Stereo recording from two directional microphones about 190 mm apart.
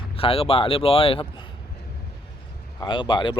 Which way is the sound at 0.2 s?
30° left (ahead or behind).